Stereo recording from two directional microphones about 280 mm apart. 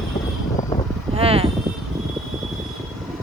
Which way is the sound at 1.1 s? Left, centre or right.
Right.